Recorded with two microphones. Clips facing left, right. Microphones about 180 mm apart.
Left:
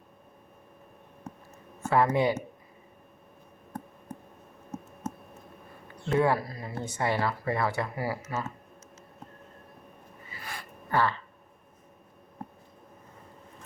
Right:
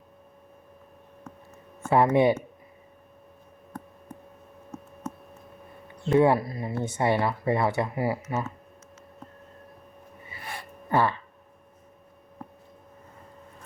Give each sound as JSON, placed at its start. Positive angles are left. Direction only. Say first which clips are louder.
{"t": 1.9, "sound": "speech", "louder": "right 4 dB", "side_deg": -25}
{"t": 6.1, "sound": "speech", "louder": "right 5 dB", "side_deg": -25}
{"t": 10.2, "sound": "a sound", "louder": "right 2 dB", "side_deg": -25}